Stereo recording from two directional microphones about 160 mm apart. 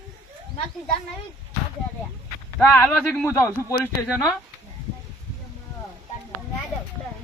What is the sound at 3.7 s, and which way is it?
Speech, 15° left (ahead or behind).